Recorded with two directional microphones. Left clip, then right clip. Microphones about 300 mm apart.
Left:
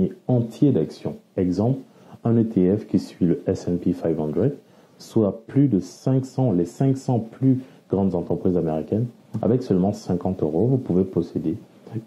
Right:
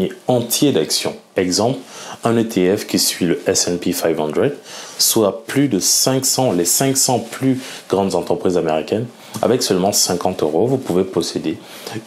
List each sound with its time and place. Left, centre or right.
0.5 s speech: centre
8.2 s speech: centre
10.4 s speech: right
11.0 s speech: centre